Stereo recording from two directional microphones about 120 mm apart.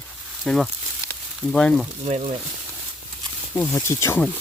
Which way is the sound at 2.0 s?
60° right (ahead or behind).